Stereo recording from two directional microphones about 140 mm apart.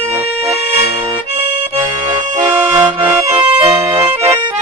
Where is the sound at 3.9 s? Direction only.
45° right (ahead or behind).